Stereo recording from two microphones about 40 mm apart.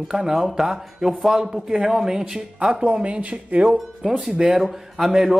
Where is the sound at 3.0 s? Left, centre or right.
Right.